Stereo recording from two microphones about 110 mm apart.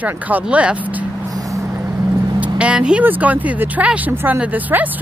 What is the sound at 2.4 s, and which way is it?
Speech, 10° right (ahead or behind).